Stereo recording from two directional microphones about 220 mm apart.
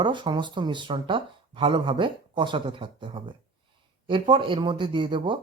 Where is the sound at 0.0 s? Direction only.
20° right (ahead or behind).